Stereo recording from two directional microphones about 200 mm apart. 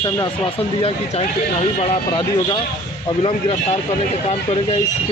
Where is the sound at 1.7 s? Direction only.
25° left (ahead or behind).